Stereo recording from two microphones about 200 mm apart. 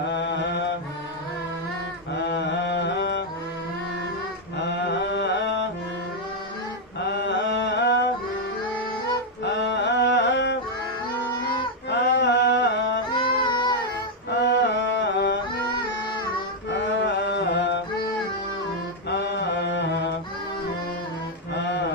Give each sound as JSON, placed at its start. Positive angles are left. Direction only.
{"t": 0.1, "sound": "mantra", "side_deg": 60}
{"t": 2.1, "sound": "mantra", "side_deg": 60}
{"t": 4.5, "sound": "mantra", "side_deg": 60}
{"t": 7.0, "sound": "mantra", "side_deg": 60}
{"t": 9.4, "sound": "a sound", "side_deg": 60}
{"t": 11.9, "sound": "a sound", "side_deg": 60}
{"t": 13.1, "sound": "a sound", "side_deg": 25}
{"t": 14.4, "sound": "music", "side_deg": 65}
{"t": 16.6, "sound": "music", "side_deg": 65}
{"t": 19.0, "sound": "mantra", "side_deg": 60}